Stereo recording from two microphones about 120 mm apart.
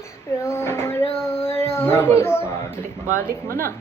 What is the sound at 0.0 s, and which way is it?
Child singing, 25° left (ahead or behind).